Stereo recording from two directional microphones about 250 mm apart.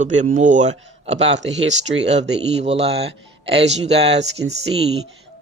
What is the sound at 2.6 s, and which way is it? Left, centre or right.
Speech, right.